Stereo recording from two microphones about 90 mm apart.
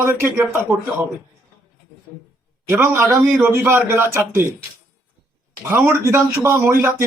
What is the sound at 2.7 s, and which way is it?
Speech, 25° right (ahead or behind).